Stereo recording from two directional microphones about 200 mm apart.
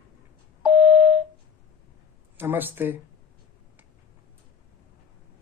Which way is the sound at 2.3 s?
10° right (ahead or behind).